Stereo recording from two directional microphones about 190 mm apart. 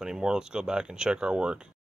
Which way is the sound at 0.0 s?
5° right (ahead or behind).